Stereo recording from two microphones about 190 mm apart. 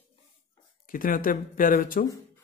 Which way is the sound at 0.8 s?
45° left (ahead or behind).